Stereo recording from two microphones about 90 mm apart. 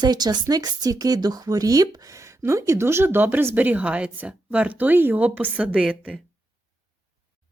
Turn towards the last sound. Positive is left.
turn(degrees=-10)  # may be behind; listen again after turning